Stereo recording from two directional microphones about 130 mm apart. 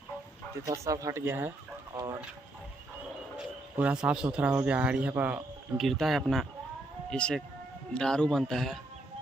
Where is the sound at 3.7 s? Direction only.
10° right (ahead or behind).